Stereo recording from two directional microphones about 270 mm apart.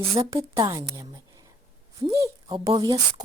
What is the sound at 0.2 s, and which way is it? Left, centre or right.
A woman's voice, centre.